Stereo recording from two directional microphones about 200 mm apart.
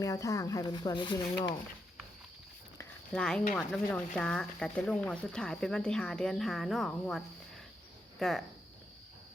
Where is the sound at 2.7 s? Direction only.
5° left (ahead or behind).